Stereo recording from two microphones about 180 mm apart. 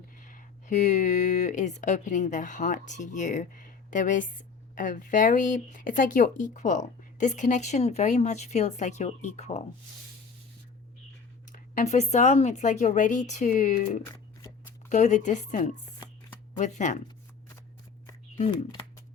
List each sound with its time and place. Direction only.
0.3 s speech: 45° left (ahead or behind)
11.5 s speech: 45° left (ahead or behind)